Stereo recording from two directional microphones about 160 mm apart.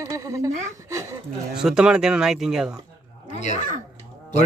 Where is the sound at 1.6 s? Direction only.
5° right (ahead or behind).